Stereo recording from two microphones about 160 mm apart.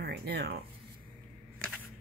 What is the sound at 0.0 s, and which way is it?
Speech, 85° right.